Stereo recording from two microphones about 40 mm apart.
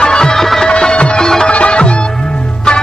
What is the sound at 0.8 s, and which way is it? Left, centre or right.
Music, left.